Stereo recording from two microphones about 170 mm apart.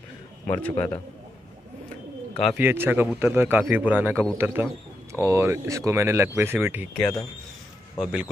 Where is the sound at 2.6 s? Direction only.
10° right (ahead or behind).